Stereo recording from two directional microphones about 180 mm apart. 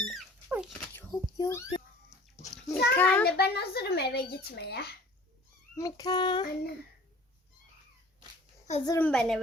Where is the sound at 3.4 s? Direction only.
60° left (ahead or behind).